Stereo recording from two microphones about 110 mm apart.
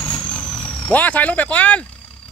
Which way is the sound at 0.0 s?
10° left (ahead or behind).